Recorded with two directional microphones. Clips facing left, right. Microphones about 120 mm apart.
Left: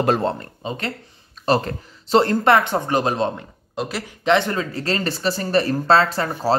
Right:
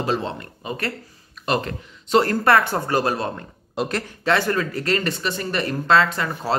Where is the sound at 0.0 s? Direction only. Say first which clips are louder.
Left 5 dB; 50° left (ahead or behind).